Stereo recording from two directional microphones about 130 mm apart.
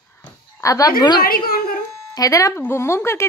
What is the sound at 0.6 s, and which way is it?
Speech, 25° left (ahead or behind).